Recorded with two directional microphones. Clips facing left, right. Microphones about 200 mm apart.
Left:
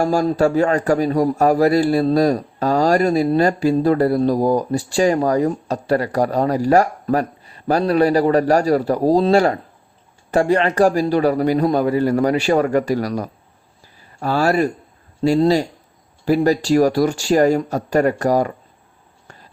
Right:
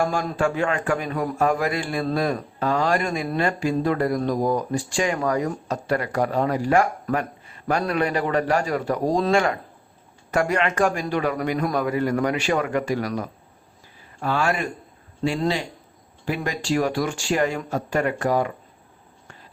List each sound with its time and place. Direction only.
0.0 s a man's voice: 40° left (ahead or behind)